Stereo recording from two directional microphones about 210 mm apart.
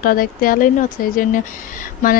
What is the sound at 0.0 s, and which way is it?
Speech, 40° left (ahead or behind).